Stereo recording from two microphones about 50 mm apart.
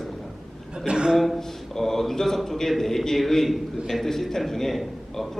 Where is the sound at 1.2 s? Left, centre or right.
Centre.